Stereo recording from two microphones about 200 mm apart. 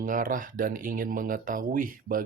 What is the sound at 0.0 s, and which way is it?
Speech, 40° right (ahead or behind).